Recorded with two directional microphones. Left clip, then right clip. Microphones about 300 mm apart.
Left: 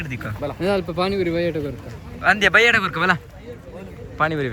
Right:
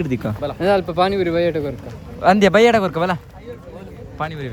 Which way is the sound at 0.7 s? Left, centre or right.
Centre.